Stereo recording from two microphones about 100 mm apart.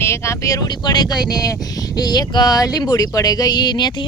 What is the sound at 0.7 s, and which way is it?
Speech, 45° left (ahead or behind).